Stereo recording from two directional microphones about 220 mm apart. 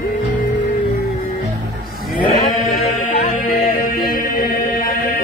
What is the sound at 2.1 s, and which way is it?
Music, 35° left (ahead or behind).